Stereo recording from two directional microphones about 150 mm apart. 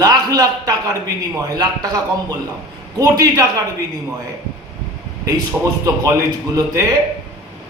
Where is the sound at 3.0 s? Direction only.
25° right (ahead or behind).